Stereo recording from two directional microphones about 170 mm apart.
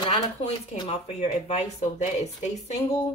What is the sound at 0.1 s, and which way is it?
Speech, 40° left (ahead or behind).